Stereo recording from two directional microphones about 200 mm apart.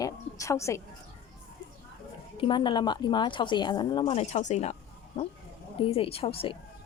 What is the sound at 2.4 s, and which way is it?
A woman's voice, 25° left (ahead or behind).